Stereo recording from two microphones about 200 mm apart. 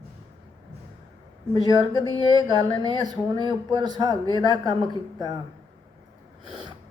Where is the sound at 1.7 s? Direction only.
20° right (ahead or behind).